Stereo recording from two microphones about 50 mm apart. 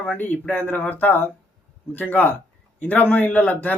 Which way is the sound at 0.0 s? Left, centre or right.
Left.